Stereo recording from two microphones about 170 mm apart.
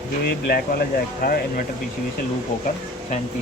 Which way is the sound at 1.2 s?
55° left (ahead or behind).